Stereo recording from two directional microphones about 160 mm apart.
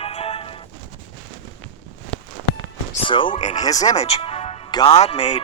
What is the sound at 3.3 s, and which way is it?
Speech, 50° left (ahead or behind).